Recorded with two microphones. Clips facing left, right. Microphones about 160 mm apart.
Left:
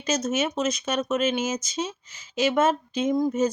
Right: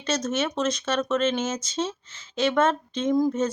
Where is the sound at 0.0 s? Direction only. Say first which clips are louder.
Left 1 dB; 10° left (ahead or behind).